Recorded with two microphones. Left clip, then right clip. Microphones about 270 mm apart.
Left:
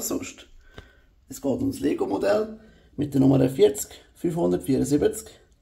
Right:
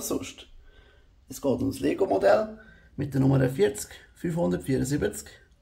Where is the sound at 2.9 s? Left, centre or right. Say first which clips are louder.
Left 5 dB; right.